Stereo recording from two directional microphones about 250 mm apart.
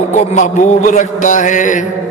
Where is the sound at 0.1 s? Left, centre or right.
Left.